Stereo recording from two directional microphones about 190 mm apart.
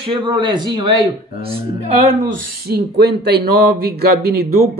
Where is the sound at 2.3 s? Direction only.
55° right (ahead or behind).